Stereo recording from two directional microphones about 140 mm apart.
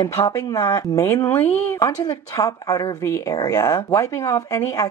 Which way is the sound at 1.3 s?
15° left (ahead or behind).